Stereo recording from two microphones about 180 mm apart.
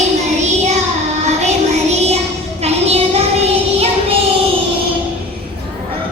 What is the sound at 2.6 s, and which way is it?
Child singing, 35° right (ahead or behind).